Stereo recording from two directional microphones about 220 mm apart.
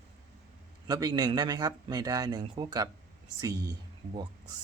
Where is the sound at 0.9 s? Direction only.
20° right (ahead or behind).